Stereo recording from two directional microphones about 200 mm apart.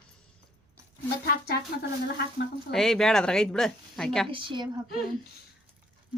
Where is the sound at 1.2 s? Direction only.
55° left (ahead or behind).